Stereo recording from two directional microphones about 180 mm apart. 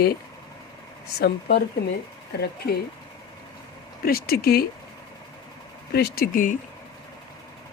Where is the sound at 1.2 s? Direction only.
65° left (ahead or behind).